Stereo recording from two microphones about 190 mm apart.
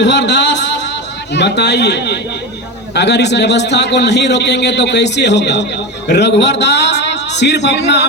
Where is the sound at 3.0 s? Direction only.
65° left (ahead or behind).